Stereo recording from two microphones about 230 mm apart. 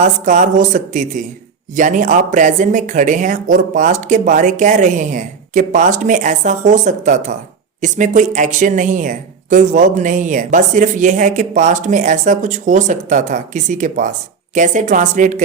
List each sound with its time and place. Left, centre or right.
0.0 s speech: right